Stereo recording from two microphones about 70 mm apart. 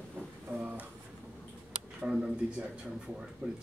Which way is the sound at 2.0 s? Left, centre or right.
Centre.